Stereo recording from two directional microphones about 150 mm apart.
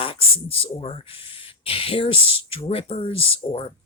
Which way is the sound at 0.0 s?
40° left (ahead or behind).